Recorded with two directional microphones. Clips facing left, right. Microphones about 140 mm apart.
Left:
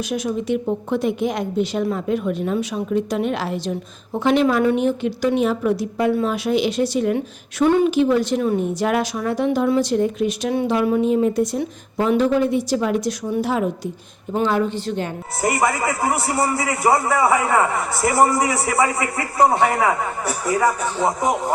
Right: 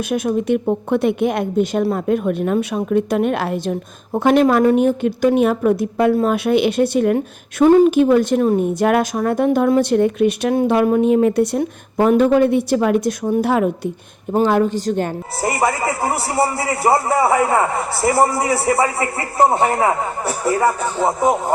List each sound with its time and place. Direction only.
0.1 s a woman's voice: 55° right (ahead or behind)
7.6 s a woman's voice: 40° right (ahead or behind); by 13.9 s 60° right (ahead or behind)
14.3 s a woman's voice: 45° right (ahead or behind)
15.4 s a man's voice: 30° right (ahead or behind)
18.3 s a man's voice: 30° right (ahead or behind)